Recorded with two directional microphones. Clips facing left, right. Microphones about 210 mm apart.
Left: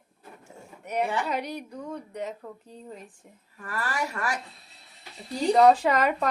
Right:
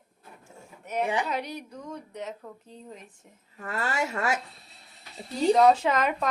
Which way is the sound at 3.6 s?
25° right (ahead or behind).